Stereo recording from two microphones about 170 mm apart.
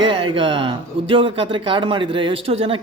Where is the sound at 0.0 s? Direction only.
30° right (ahead or behind).